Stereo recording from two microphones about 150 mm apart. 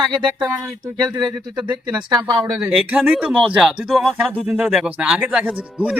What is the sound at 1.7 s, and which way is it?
Speech, 30° right (ahead or behind).